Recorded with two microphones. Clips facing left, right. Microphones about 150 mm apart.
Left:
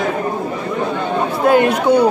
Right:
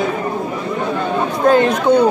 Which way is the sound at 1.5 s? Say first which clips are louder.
Even; 10° left (ahead or behind).